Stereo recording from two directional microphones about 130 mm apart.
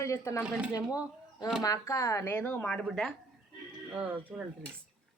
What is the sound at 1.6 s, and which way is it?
Speech, 30° left (ahead or behind).